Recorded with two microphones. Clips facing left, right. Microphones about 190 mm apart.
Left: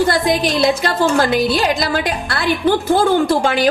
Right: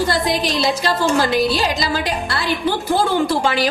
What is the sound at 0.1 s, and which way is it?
A woman's voice, 55° left (ahead or behind).